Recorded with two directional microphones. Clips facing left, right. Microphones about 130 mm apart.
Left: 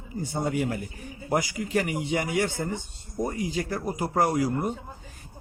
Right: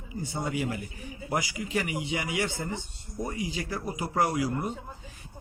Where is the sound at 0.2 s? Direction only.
50° left (ahead or behind).